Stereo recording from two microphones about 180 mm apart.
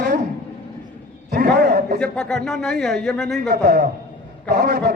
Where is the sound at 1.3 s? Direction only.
55° right (ahead or behind).